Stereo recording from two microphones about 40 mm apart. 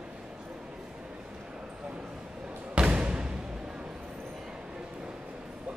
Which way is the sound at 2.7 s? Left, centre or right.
Right.